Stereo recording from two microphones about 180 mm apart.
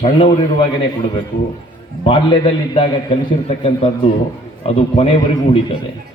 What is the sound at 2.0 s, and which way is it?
A man's voice, 30° left (ahead or behind).